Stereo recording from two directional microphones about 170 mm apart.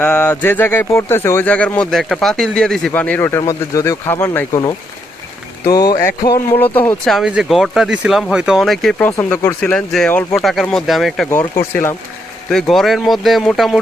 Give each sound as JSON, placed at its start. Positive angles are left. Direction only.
{"t": 0.0, "sound": "speech", "side_deg": 10}
{"t": 5.7, "sound": "music", "side_deg": 20}
{"t": 6.3, "sound": "speech", "side_deg": 15}
{"t": 11.3, "sound": "speech", "side_deg": 15}
{"t": 12.5, "sound": "speech", "side_deg": 0}